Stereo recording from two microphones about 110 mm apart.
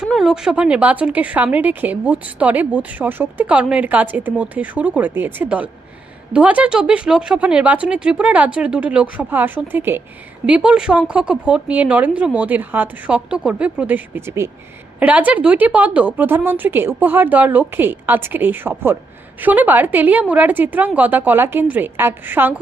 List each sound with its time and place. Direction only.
0.0 s a woman's voice: 5° right (ahead or behind); by 10.0 s 20° right (ahead or behind)
10.4 s a woman's voice: 10° right (ahead or behind)